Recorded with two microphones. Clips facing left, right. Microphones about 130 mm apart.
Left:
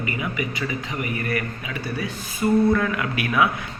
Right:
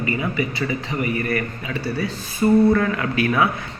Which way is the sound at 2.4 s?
5° left (ahead or behind).